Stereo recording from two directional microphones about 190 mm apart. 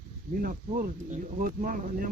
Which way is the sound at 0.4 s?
45° right (ahead or behind).